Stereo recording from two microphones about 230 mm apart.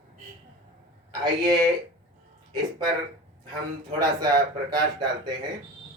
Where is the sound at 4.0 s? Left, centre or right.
Centre.